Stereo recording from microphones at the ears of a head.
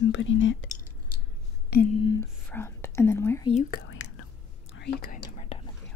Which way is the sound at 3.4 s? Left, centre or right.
Left.